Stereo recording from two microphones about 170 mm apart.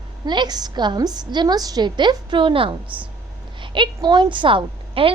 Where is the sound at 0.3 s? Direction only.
25° right (ahead or behind).